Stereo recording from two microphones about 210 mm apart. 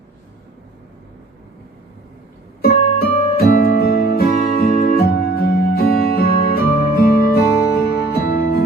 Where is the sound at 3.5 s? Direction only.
45° left (ahead or behind).